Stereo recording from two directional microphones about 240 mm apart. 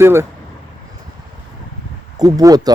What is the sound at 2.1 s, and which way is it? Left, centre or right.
Speech, centre.